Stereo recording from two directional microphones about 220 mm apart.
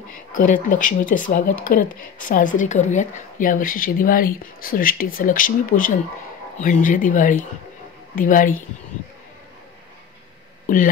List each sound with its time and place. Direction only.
0.5 s speech: 35° left (ahead or behind)
10.7 s speech: 35° left (ahead or behind)